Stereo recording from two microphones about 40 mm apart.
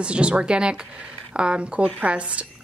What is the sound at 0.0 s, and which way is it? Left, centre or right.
Speech, right.